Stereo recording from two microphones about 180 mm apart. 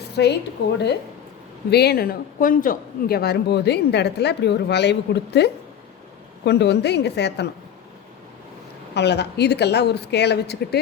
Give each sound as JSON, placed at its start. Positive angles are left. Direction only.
{"t": 0.2, "sound": "speech", "side_deg": 75}
{"t": 1.7, "sound": "speech", "side_deg": 60}
{"t": 9.0, "sound": "speech", "side_deg": 70}